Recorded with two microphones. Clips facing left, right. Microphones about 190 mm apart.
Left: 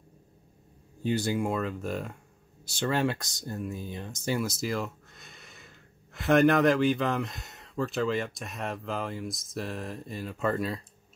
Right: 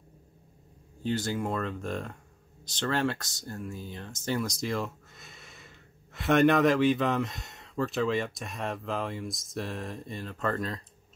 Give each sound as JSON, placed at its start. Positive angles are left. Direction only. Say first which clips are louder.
{"t": 1.0, "sound": "speech", "louder": "left 2 dB", "side_deg": 10}